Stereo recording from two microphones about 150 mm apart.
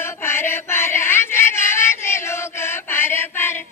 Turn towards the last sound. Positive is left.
turn(degrees=15)  # may be behind; listen again after turning